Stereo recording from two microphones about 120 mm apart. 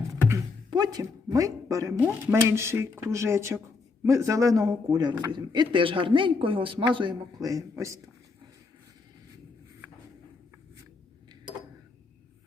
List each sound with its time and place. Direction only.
0.7 s a man's voice: 35° right (ahead or behind)
2.0 s a man's voice: 15° right (ahead or behind)